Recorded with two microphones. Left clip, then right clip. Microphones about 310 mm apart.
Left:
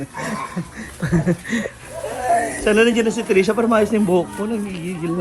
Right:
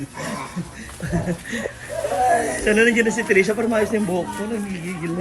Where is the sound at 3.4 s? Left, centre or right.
Left.